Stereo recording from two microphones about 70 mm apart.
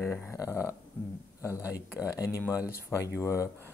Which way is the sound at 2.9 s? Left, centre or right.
Left.